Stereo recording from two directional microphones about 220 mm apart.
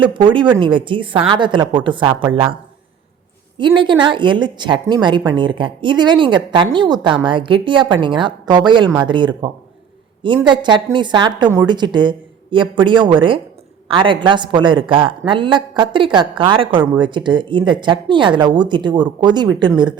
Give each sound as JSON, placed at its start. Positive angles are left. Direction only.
{"t": 0.0, "sound": "a woman's voice", "side_deg": -20}
{"t": 3.6, "sound": "a woman's voice", "side_deg": -20}